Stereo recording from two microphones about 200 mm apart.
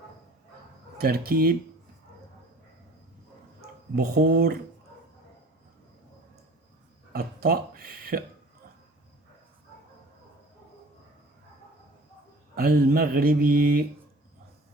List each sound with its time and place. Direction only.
0.9 s speech: 50° right (ahead or behind)
3.9 s speech: 50° right (ahead or behind)
7.1 s speech: 50° right (ahead or behind)
12.5 s speech: 50° right (ahead or behind)